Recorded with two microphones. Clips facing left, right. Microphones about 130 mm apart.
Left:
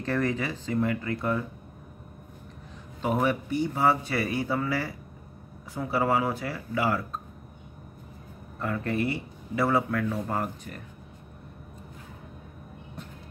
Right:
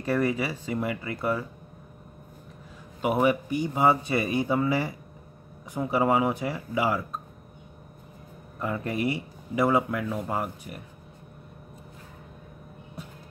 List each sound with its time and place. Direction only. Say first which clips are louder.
0.0 s speech: right 2 dB; 10° right (ahead or behind)
3.0 s speech: right 3 dB; 10° right (ahead or behind)
8.5 s speech: left 1 dB; 15° right (ahead or behind)